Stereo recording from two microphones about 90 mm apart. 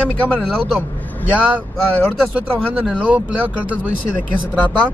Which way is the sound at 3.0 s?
15° right (ahead or behind).